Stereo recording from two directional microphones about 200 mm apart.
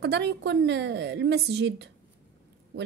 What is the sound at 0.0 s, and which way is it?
A woman's voice, 60° right (ahead or behind).